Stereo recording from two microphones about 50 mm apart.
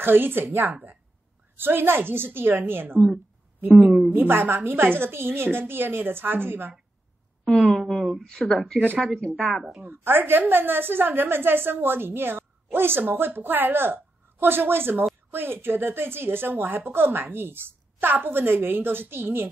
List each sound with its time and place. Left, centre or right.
0.0 s a woman's voice: right
3.8 s a woman's voice: centre
4.1 s a woman's voice: right
7.6 s a woman's voice: centre
8.2 s a woman's voice: centre
9.8 s a woman's voice: right